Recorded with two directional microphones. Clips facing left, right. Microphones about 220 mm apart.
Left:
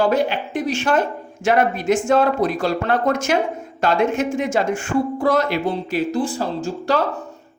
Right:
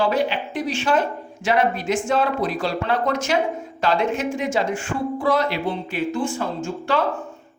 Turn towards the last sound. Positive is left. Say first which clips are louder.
# left 2 dB
turn(degrees=40)  # may be behind; listen again after turning